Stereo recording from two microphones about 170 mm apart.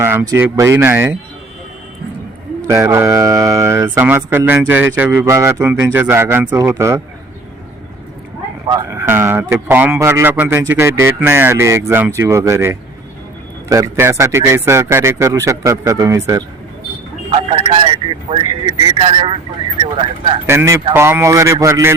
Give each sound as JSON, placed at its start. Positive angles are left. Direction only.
{"t": 0.0, "sound": "a man's voice", "side_deg": -15}
{"t": 2.6, "sound": "a man's voice", "side_deg": -20}
{"t": 8.7, "sound": "a man's voice", "side_deg": -15}
{"t": 17.3, "sound": "speech", "side_deg": -30}
{"t": 20.5, "sound": "a man's voice", "side_deg": -15}